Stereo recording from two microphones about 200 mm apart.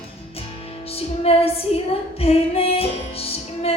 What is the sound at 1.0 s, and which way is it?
Music, 30° left (ahead or behind).